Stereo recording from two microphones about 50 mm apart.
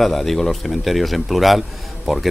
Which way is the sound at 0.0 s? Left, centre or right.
Centre.